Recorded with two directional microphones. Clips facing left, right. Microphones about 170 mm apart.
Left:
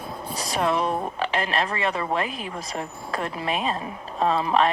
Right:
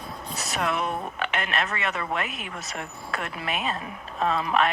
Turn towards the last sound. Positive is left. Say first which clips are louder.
# left 3 dB
turn(degrees=30)  # may be behind; listen again after turning